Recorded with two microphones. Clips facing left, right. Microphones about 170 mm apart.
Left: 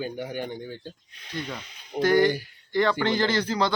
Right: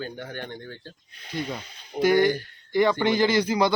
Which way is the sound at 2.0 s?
10° right (ahead or behind).